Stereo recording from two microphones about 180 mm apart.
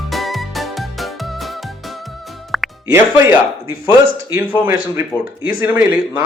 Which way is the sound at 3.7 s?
90° right.